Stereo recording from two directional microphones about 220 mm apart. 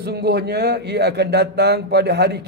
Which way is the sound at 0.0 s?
45° right (ahead or behind).